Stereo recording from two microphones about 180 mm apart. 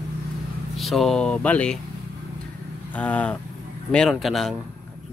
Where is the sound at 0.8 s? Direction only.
Centre (ahead or behind).